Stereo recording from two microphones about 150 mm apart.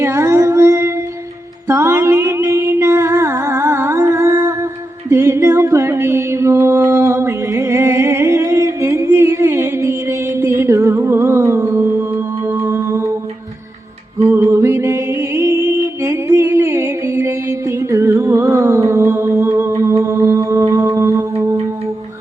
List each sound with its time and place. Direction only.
0.0 s music: 20° right (ahead or behind)
14.3 s music: 15° right (ahead or behind)